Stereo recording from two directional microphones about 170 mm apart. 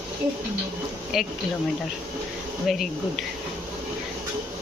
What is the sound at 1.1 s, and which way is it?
Speech, centre (ahead or behind).